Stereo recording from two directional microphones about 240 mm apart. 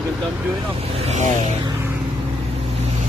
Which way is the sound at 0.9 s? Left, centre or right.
Right.